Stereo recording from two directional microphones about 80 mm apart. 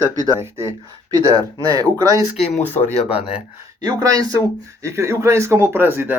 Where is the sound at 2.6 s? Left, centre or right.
Left.